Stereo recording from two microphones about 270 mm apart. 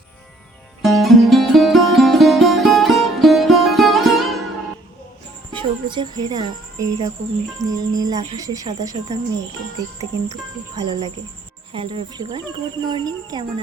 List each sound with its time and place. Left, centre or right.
0.8 s music: centre
5.5 s a woman's voice: centre
10.8 s speech: centre